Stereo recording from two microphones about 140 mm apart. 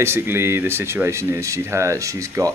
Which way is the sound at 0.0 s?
20° right (ahead or behind).